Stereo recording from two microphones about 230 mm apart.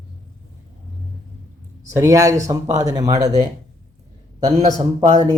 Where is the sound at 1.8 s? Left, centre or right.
Centre.